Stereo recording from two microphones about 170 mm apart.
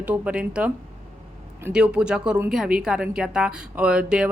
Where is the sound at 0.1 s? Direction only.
5° right (ahead or behind).